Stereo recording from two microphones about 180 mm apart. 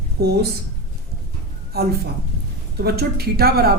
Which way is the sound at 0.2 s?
60° right (ahead or behind).